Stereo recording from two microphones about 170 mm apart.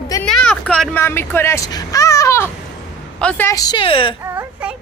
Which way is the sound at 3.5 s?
20° left (ahead or behind).